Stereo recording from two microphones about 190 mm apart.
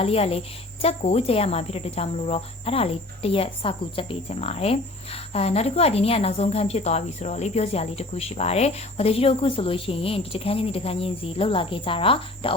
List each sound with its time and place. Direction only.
0.0 s speech: 30° left (ahead or behind)